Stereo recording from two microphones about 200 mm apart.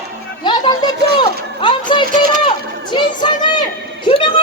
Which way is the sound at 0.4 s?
20° left (ahead or behind).